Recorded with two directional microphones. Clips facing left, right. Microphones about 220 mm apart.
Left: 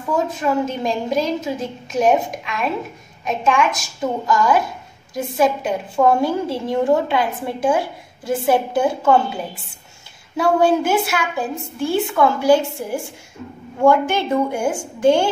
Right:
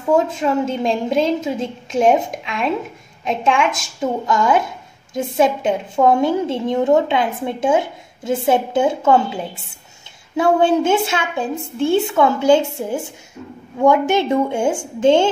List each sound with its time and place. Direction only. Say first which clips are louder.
0.1 s a woman's voice: right 3 dB; 25° right (ahead or behind)
10.3 s a woman's voice: right 1 dB; 25° right (ahead or behind)